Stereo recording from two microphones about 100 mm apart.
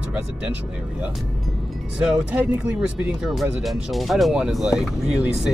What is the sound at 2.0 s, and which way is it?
Speech, 10° right (ahead or behind).